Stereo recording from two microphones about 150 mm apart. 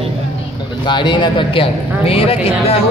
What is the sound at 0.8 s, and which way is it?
Speech, 30° left (ahead or behind).